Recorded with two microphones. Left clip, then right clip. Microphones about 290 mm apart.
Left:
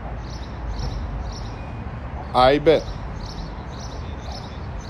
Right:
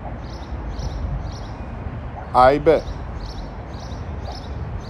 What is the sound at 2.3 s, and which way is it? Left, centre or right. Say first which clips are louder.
Speech: right 2 dB; centre.